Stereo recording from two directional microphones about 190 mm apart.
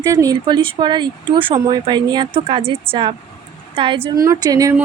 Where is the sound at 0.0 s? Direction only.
15° right (ahead or behind).